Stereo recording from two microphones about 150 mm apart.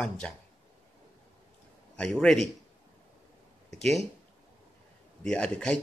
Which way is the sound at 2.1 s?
Centre (ahead or behind).